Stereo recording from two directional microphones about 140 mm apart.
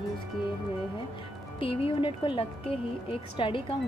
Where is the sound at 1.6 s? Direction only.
40° left (ahead or behind).